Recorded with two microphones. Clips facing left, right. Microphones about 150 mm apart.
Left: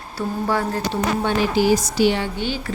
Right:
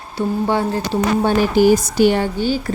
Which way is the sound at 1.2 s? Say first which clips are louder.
Right 6 dB; 45° right (ahead or behind).